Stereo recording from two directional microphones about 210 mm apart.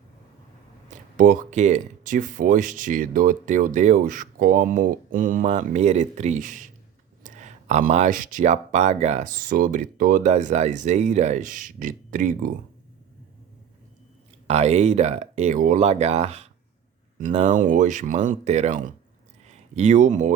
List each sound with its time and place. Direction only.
1.1 s speech: 40° right (ahead or behind)
14.4 s speech: 30° right (ahead or behind)